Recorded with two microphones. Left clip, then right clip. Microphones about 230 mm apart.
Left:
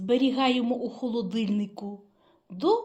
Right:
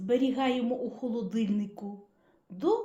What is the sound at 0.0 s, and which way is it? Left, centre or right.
A woman's voice, left.